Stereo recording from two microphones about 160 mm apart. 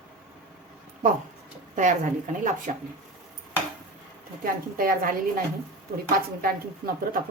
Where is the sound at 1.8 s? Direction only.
50° right (ahead or behind).